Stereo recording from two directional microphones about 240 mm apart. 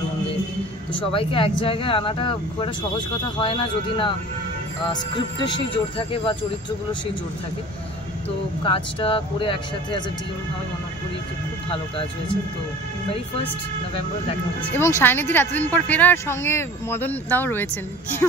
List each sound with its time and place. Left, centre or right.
0.9 s speech: left
5.4 s speech: left
8.6 s speech: left
15.0 s speech: centre